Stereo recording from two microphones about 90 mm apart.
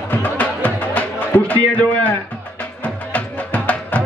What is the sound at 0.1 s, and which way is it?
Music, 20° left (ahead or behind).